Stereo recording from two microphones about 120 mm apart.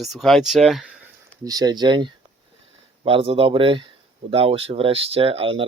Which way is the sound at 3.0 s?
50° right (ahead or behind).